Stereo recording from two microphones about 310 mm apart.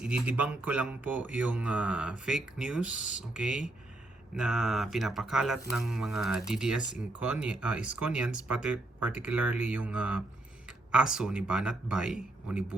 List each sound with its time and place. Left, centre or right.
0.0 s speech: centre